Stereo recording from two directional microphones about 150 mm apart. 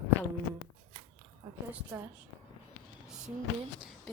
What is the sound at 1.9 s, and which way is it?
Speech, 15° right (ahead or behind).